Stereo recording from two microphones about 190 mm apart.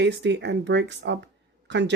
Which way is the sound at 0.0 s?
65° right (ahead or behind).